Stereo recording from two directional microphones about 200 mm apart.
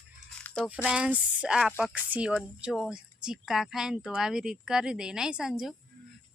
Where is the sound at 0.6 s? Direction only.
5° right (ahead or behind).